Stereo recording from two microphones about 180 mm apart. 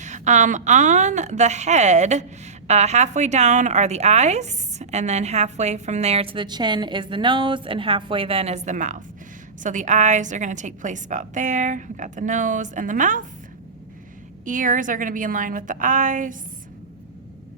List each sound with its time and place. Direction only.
0.0 s a woman's voice: 40° right (ahead or behind)
14.4 s a woman's voice: 45° right (ahead or behind)